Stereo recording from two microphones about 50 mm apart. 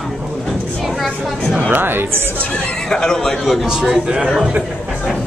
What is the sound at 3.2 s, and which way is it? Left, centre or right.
Speech, centre.